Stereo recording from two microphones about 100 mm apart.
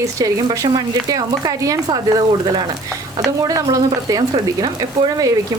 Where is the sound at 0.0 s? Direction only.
35° right (ahead or behind).